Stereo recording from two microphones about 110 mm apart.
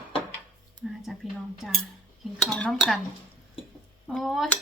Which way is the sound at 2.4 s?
10° left (ahead or behind).